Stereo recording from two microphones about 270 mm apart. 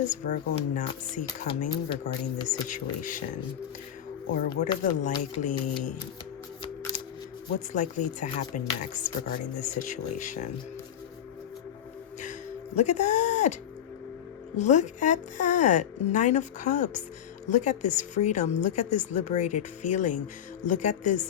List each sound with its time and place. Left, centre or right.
0.1 s a woman's voice: left
4.4 s a woman's voice: left
7.7 s a woman's voice: left
12.2 s music: left
14.5 s a woman's voice: left